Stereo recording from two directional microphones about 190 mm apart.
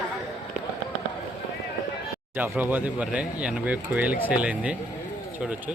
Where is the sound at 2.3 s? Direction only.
10° right (ahead or behind).